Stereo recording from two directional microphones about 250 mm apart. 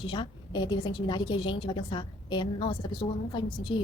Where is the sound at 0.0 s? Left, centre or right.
Centre.